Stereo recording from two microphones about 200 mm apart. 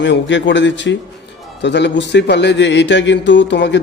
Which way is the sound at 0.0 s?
65° left (ahead or behind).